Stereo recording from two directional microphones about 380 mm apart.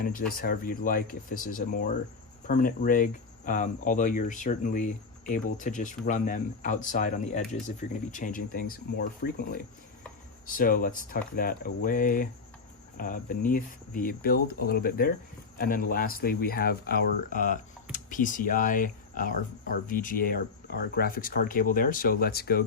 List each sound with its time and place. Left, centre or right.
0.0 s speech: left